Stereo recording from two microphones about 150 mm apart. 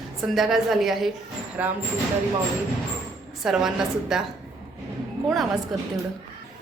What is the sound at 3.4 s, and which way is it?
Speech, 5° right (ahead or behind).